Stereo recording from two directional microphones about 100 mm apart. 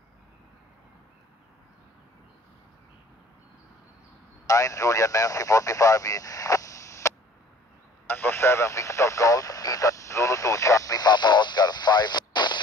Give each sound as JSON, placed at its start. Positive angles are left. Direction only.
{"t": 4.5, "sound": "speech", "side_deg": 35}